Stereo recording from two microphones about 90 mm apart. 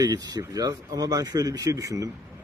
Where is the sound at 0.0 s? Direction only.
50° right (ahead or behind).